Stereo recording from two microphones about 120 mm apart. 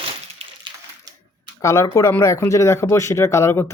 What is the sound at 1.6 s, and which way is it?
Speech, 25° left (ahead or behind).